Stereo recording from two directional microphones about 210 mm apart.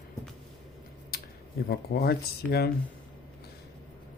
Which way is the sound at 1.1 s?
45° left (ahead or behind).